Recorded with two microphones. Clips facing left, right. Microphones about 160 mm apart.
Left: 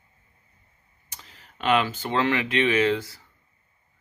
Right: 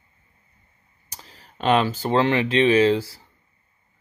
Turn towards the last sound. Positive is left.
turn(degrees=-30)  # may be behind; listen again after turning